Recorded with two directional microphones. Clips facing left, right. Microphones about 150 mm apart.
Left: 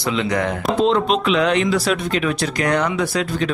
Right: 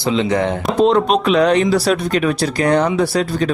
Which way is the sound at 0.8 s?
45° right (ahead or behind).